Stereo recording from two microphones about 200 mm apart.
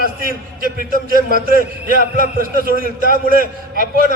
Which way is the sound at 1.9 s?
45° right (ahead or behind).